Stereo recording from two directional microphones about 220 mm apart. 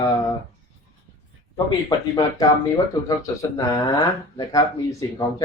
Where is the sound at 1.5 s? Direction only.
15° left (ahead or behind).